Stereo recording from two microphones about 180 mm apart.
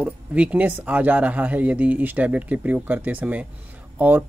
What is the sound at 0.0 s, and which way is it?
Speech, 10° right (ahead or behind).